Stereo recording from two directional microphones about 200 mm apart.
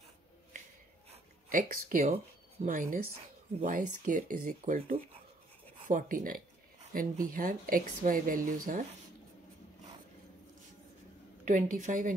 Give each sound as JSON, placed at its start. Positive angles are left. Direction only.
{"t": 1.5, "sound": "a woman's voice", "side_deg": -45}
{"t": 11.4, "sound": "a woman's voice", "side_deg": -40}